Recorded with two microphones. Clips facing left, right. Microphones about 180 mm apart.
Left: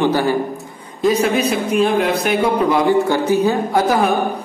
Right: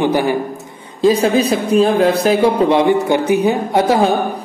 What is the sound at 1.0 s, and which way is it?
A man's voice, 30° right (ahead or behind).